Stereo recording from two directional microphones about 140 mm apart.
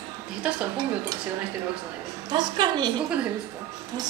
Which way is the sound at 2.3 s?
30° right (ahead or behind).